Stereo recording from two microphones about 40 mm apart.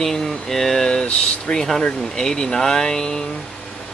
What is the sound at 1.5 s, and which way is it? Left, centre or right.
Speech, centre.